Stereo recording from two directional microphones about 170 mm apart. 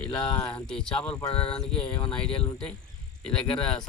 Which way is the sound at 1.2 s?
35° left (ahead or behind).